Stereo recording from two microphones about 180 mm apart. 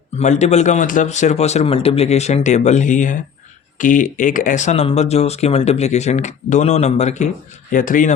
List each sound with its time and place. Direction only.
0.2 s speech: 40° left (ahead or behind)